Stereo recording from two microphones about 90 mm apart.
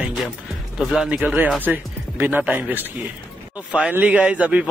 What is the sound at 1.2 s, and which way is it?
Speech, 15° right (ahead or behind).